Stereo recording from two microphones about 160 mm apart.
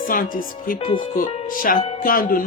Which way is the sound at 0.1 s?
60° left (ahead or behind).